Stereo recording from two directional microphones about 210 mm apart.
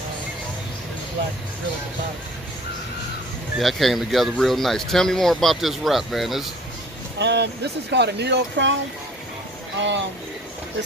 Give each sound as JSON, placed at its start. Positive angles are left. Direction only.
{"t": 3.5, "sound": "speech", "side_deg": 0}
{"t": 7.2, "sound": "speech", "side_deg": -55}
{"t": 9.8, "sound": "speech", "side_deg": -60}